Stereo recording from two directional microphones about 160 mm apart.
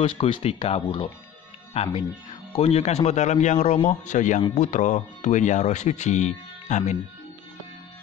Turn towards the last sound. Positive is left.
turn(degrees=45)  # may be behind; listen again after turning